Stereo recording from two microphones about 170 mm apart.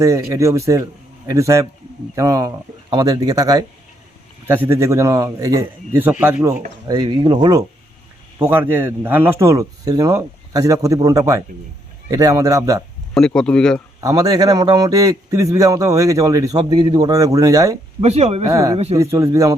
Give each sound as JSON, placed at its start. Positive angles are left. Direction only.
{"t": 0.0, "sound": "a man's voice", "side_deg": -20}
{"t": 4.4, "sound": "a man's voice", "side_deg": -10}
{"t": 6.8, "sound": "a man's voice", "side_deg": -25}
{"t": 8.4, "sound": "a man's voice", "side_deg": -10}
{"t": 13.1, "sound": "speech", "side_deg": 5}
{"t": 14.0, "sound": "a man's voice", "side_deg": -20}
{"t": 18.0, "sound": "speech", "side_deg": -40}
{"t": 18.5, "sound": "a man's voice", "side_deg": -20}